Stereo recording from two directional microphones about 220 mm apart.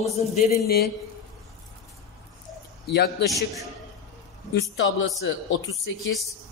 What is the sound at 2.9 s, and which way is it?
Speech, 50° left (ahead or behind).